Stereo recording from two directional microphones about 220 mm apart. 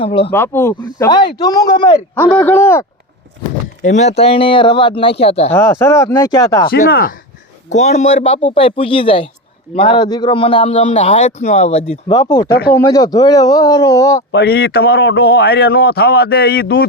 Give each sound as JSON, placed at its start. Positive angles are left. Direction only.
{"t": 0.0, "sound": "a man's voice", "side_deg": 25}
{"t": 0.3, "sound": "speech", "side_deg": 10}
{"t": 2.1, "sound": "speech", "side_deg": 5}
{"t": 3.8, "sound": "a man's voice", "side_deg": 30}
{"t": 5.5, "sound": "speech", "side_deg": 10}
{"t": 6.7, "sound": "speech", "side_deg": 40}
{"t": 7.7, "sound": "a man's voice", "side_deg": 30}
{"t": 12.5, "sound": "a man's voice", "side_deg": 45}
{"t": 12.7, "sound": "speech", "side_deg": 15}
{"t": 14.3, "sound": "a man's voice", "side_deg": 45}